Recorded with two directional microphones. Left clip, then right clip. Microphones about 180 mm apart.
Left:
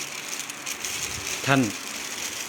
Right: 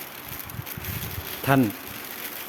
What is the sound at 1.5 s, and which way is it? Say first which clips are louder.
Speech: right 1 dB; 25° right (ahead or behind).